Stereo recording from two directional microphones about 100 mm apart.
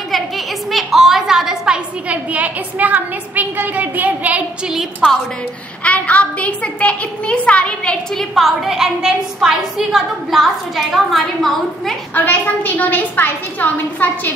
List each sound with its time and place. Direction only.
0.7 s a woman's voice: centre (ahead or behind)
4.7 s a child's voice: centre (ahead or behind)
5.9 s a child's voice: 15° left (ahead or behind)
12.1 s a woman's voice: 15° left (ahead or behind)